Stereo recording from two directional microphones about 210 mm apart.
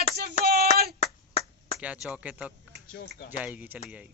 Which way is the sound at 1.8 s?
5° right (ahead or behind).